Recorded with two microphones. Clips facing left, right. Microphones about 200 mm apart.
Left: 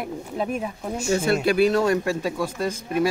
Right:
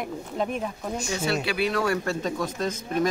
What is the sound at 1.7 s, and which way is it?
Speech, 20° left (ahead or behind).